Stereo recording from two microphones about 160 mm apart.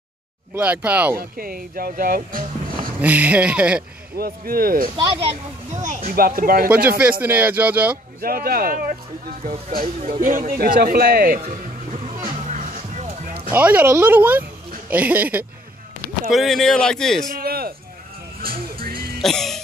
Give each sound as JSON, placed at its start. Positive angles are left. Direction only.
{"t": 0.6, "sound": "speech", "side_deg": -10}
{"t": 1.1, "sound": "speech", "side_deg": -65}
{"t": 3.0, "sound": "speech", "side_deg": -10}
{"t": 4.2, "sound": "speech", "side_deg": -70}
{"t": 4.9, "sound": "speech", "side_deg": -40}
{"t": 7.0, "sound": "speech", "side_deg": -10}
{"t": 8.2, "sound": "speech", "side_deg": -70}
{"t": 9.4, "sound": "speech", "side_deg": -35}
{"t": 10.2, "sound": "speech", "side_deg": -55}
{"t": 11.9, "sound": "music", "side_deg": -50}
{"t": 13.5, "sound": "speech", "side_deg": -10}
{"t": 17.3, "sound": "a sound", "side_deg": -70}
{"t": 18.4, "sound": "music", "side_deg": -70}
{"t": 19.1, "sound": "music", "side_deg": 0}